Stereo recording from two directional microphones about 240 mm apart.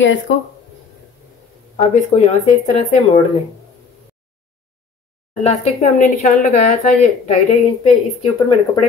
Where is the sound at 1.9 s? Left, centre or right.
Left.